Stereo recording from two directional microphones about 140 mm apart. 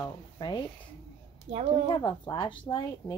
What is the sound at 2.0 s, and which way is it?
Speech, 35° left (ahead or behind).